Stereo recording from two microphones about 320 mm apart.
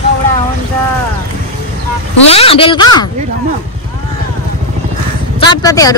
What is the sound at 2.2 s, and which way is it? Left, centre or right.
Speech, centre.